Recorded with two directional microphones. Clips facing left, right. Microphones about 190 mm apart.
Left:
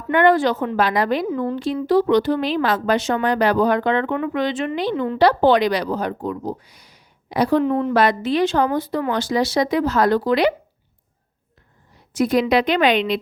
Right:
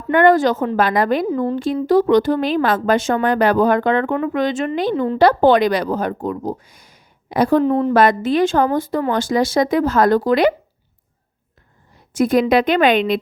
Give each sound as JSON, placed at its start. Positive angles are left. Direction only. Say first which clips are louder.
{"t": 0.1, "sound": "a woman's voice", "louder": "right 3 dB", "side_deg": -45}
{"t": 1.3, "sound": "a woman's voice", "louder": "right 3 dB", "side_deg": -35}
{"t": 1.5, "sound": "a woman's voice", "louder": "right 2 dB", "side_deg": -50}
{"t": 7.6, "sound": "a woman's voice", "louder": "right 3 dB", "side_deg": -35}
{"t": 7.9, "sound": "a woman's voice", "louder": "right 3 dB", "side_deg": -50}
{"t": 12.1, "sound": "a woman's voice", "louder": "right 3 dB", "side_deg": -50}